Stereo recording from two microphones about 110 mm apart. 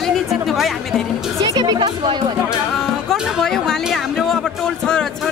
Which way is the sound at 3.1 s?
Centre (ahead or behind).